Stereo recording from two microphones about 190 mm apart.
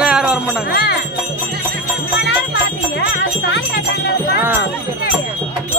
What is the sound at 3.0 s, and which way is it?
Music, 65° left (ahead or behind).